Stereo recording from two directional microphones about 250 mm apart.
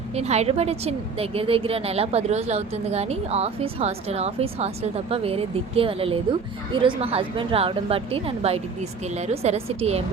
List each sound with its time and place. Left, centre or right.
0.1 s a woman's voice: right